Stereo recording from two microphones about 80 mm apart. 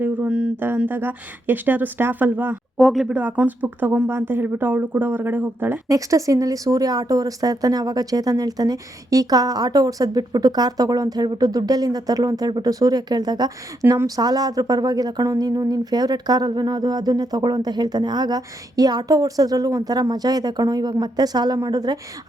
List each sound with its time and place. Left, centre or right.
0.3 s a sound: centre
0.9 s speech: right
2.7 s speech: centre
3.1 s speech: right
5.9 s a woman's voice: right
13.8 s speech: right
14.2 s speech: right